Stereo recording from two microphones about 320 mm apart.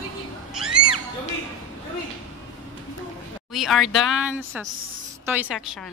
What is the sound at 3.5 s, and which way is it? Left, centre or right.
A woman's voice, centre.